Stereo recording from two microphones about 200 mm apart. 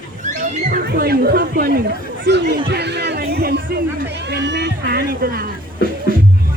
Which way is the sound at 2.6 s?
55° right (ahead or behind).